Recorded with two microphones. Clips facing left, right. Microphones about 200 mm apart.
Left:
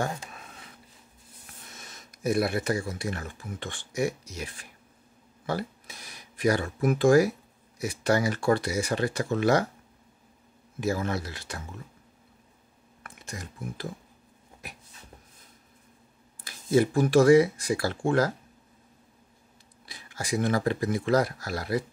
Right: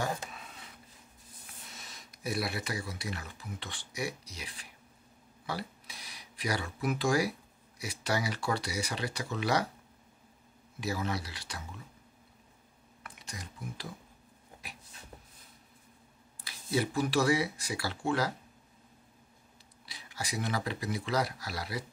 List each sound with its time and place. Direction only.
1.8 s speech: 50° left (ahead or behind)
10.8 s speech: 50° left (ahead or behind)
13.0 s speech: 50° left (ahead or behind)
16.4 s speech: 50° left (ahead or behind)
19.9 s speech: 50° left (ahead or behind)